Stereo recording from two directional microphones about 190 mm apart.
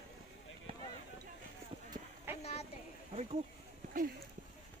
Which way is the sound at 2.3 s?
10° right (ahead or behind).